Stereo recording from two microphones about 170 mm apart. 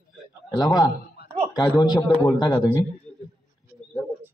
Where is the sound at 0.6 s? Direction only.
25° left (ahead or behind).